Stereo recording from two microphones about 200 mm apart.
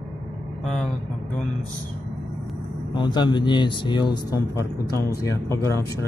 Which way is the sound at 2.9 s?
20° left (ahead or behind).